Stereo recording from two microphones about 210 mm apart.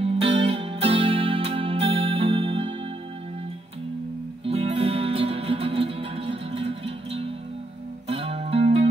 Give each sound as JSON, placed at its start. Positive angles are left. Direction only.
{"t": 0.0, "sound": "music", "side_deg": -25}
{"t": 4.5, "sound": "music", "side_deg": -25}